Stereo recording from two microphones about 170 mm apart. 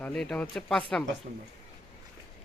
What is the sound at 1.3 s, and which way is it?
Speech, 60° right (ahead or behind).